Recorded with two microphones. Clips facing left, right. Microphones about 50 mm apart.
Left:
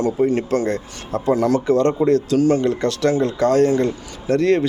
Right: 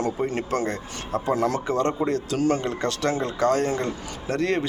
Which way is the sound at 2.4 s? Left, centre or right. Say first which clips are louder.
Left 6 dB; right.